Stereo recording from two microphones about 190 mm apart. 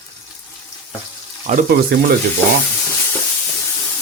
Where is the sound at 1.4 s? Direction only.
45° right (ahead or behind).